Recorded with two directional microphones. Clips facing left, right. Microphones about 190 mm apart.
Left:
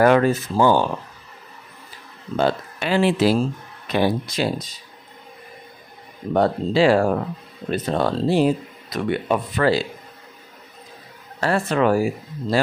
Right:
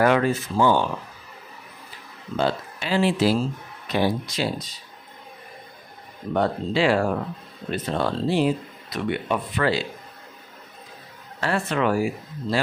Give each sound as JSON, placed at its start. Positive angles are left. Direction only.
{"t": 0.0, "sound": "speech", "side_deg": 45}
{"t": 2.3, "sound": "speech", "side_deg": 55}
{"t": 6.3, "sound": "speech", "side_deg": 40}
{"t": 11.4, "sound": "speech", "side_deg": 40}